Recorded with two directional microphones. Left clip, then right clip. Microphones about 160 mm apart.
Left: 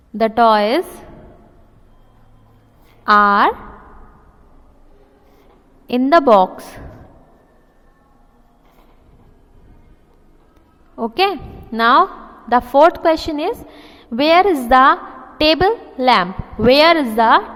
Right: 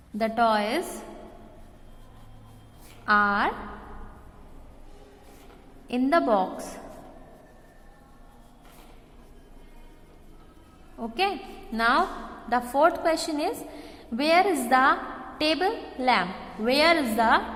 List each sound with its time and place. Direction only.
0.2 s a woman's voice: 45° left (ahead or behind)
3.1 s a woman's voice: 45° left (ahead or behind)
6.1 s a woman's voice: 45° left (ahead or behind)
10.9 s a woman's voice: 45° left (ahead or behind)